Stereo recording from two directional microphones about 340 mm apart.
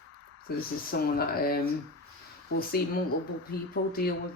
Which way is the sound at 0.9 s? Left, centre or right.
Left.